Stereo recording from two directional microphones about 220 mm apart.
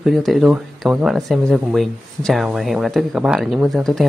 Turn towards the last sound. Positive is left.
turn(degrees=0)  # may be behind; listen again after turning